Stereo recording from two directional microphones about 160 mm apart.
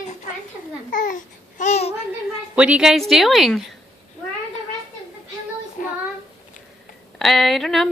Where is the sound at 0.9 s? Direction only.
55° left (ahead or behind).